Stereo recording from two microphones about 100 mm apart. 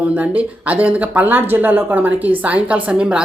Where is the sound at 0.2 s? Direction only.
15° right (ahead or behind).